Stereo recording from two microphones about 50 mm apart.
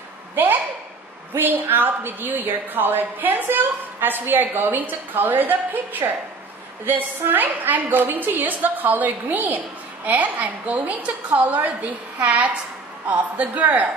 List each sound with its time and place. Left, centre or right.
1.3 s a woman's voice: right